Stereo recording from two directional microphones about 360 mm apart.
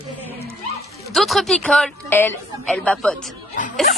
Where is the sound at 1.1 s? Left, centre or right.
Centre.